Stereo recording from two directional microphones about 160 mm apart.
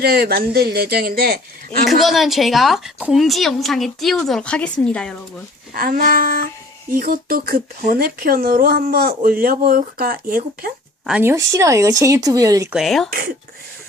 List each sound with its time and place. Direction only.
0.0 s speech: 75° right (ahead or behind)
1.9 s a woman's voice: centre (ahead or behind)
5.7 s a sound: 65° right (ahead or behind)
6.9 s speech: 60° right (ahead or behind)
11.0 s speech: 10° right (ahead or behind)
12.7 s a woman's voice: centre (ahead or behind)
13.1 s speech: 70° right (ahead or behind)